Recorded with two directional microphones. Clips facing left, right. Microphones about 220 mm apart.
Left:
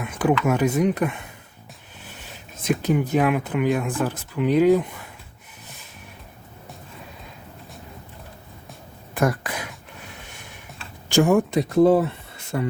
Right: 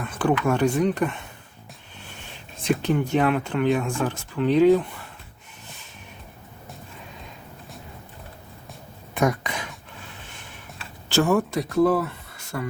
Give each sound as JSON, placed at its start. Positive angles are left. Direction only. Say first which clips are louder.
{"t": 0.0, "sound": "speech", "louder": "left 1 dB", "side_deg": 10}
{"t": 2.6, "sound": "speech", "louder": "left 1 dB", "side_deg": 5}
{"t": 9.1, "sound": "throat clearing", "louder": "even", "side_deg": 0}
{"t": 11.1, "sound": "speech", "louder": "left 3 dB", "side_deg": 15}